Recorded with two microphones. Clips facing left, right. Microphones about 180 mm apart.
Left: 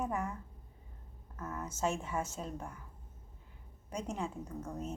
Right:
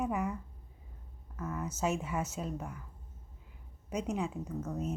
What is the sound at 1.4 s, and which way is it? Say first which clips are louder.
Speech: right 2 dB; 10° right (ahead or behind).